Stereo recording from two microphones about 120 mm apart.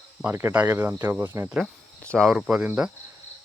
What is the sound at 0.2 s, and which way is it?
Speech, 15° right (ahead or behind).